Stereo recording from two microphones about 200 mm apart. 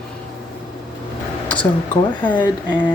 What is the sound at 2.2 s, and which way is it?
Speech, 10° left (ahead or behind).